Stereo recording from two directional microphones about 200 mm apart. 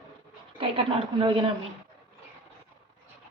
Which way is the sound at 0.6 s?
25° right (ahead or behind).